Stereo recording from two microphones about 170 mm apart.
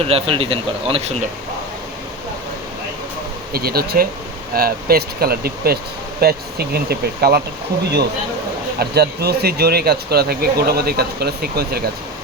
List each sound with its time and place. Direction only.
0.0 s speech: 35° right (ahead or behind)
3.5 s speech: 65° right (ahead or behind)
8.8 s speech: 70° right (ahead or behind)